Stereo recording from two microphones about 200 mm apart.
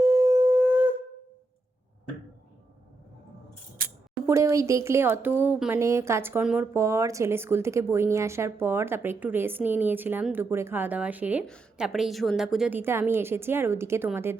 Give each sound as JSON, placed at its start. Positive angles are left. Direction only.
{"t": 0.2, "sound": "wind instrument", "side_deg": -15}
{"t": 3.8, "sound": "scissors", "side_deg": -45}
{"t": 4.3, "sound": "speech", "side_deg": -15}